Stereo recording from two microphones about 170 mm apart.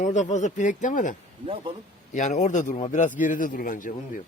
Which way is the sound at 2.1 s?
45° left (ahead or behind).